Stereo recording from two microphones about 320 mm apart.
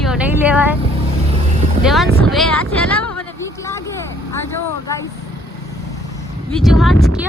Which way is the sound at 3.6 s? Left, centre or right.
Centre.